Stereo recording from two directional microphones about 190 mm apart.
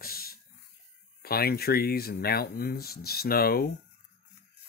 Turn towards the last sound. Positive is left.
turn(degrees=50)  # may be behind; listen again after turning